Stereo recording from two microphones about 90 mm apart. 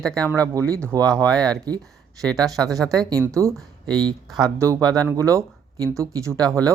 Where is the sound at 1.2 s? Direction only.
10° left (ahead or behind).